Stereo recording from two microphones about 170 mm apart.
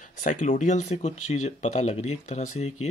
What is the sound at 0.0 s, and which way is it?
Speech, 50° left (ahead or behind).